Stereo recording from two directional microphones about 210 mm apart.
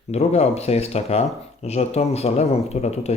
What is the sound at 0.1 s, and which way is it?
A man's voice, 30° left (ahead or behind).